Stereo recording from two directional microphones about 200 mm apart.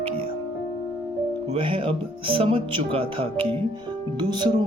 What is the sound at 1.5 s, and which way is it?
Speech, 25° right (ahead or behind).